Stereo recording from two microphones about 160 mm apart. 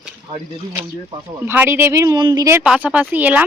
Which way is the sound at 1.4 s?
15° right (ahead or behind).